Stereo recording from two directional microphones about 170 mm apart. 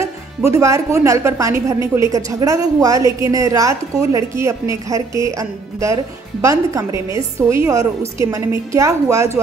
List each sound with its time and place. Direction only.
0.0 s a woman's voice: 15° right (ahead or behind)